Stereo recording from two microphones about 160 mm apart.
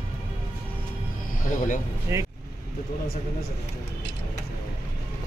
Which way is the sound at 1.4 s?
55° left (ahead or behind).